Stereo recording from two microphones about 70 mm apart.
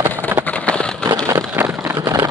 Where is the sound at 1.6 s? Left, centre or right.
Right.